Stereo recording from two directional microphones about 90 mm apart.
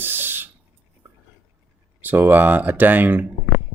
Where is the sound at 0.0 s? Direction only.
25° right (ahead or behind).